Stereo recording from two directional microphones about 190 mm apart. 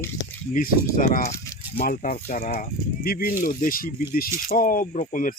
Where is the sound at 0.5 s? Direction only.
45° left (ahead or behind).